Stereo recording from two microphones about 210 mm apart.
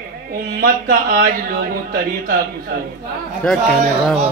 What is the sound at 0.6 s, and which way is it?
Speech, 45° right (ahead or behind).